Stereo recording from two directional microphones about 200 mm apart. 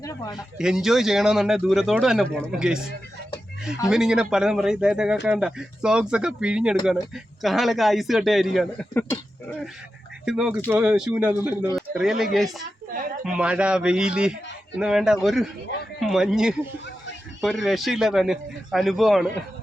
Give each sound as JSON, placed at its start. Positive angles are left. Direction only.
{"t": 0.0, "sound": "speech", "side_deg": 15}
{"t": 0.6, "sound": "speech", "side_deg": 0}
{"t": 3.8, "sound": "speech", "side_deg": 0}
{"t": 9.0, "sound": "speech", "side_deg": 10}
{"t": 10.2, "sound": "speech", "side_deg": -5}